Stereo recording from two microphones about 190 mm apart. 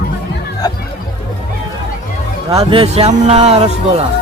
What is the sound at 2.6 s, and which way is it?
Speech, 30° right (ahead or behind).